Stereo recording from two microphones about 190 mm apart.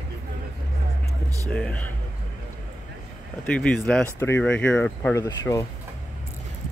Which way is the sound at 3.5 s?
5° left (ahead or behind).